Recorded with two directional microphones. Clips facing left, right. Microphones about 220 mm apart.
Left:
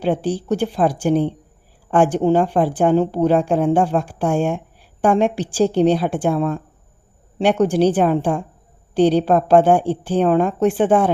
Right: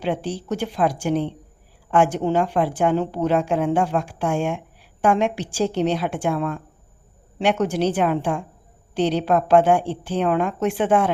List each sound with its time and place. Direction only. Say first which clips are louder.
0.0 s speech: left 5 dB; 35° left (ahead or behind)